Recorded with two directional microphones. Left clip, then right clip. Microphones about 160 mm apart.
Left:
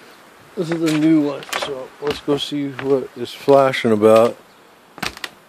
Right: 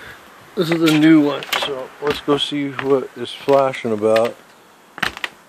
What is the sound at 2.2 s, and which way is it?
Speech, 30° left (ahead or behind).